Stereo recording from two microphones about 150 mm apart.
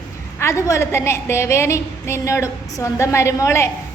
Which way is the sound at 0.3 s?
20° left (ahead or behind).